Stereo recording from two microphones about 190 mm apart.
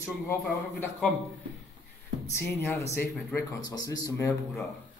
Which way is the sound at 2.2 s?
10° left (ahead or behind).